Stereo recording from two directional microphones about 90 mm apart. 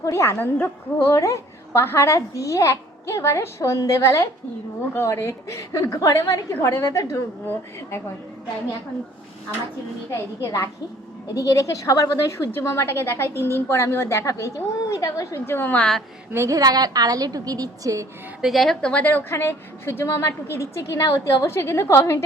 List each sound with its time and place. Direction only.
0.0 s a woman's voice: 30° left (ahead or behind)
1.1 s speech: 35° left (ahead or behind)
6.5 s speech: 30° left (ahead or behind)
10.4 s speech: 35° left (ahead or behind)
15.8 s a woman's voice: 5° left (ahead or behind)
16.3 s a woman's voice: 30° right (ahead or behind)
16.6 s a woman's voice: 45° right (ahead or behind)
18.4 s a woman's voice: centre (ahead or behind); by 22.2 s 30° left (ahead or behind)